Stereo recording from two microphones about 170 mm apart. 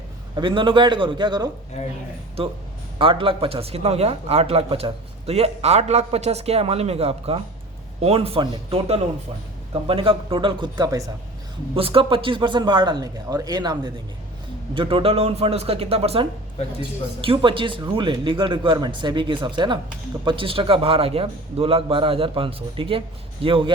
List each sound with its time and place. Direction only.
0.3 s speech: 30° right (ahead or behind)
1.8 s speech: 45° left (ahead or behind)
3.0 s speech: 30° right (ahead or behind)